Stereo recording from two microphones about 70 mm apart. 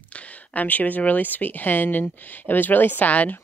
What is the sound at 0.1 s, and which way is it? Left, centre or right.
Speech, centre.